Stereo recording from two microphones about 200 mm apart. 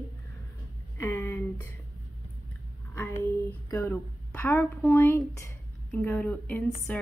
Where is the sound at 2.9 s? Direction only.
10° left (ahead or behind).